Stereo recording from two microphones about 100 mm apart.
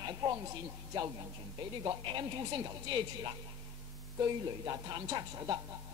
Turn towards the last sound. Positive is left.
turn(degrees=-40)  # may be behind; listen again after turning